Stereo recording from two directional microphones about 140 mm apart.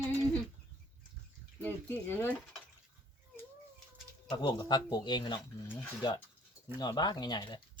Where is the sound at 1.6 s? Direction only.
15° left (ahead or behind).